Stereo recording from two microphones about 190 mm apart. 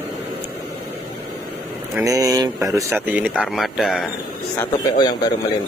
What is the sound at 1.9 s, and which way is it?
Speech, 20° right (ahead or behind).